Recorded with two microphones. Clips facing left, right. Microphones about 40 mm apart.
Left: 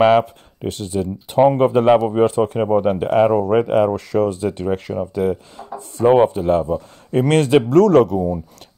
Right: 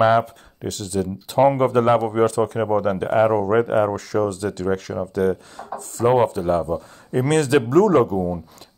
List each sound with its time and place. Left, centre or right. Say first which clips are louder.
0.0 s speech: left 3 dB; left
0.7 s speech: left 2 dB; left; by 2.2 s centre
2.2 s speech: left 3 dB; left
2.6 s speech: left 3 dB; centre
6.0 s speech: left 4 dB; left